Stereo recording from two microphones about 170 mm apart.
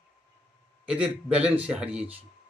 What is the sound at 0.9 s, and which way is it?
A man's voice, 5° right (ahead or behind).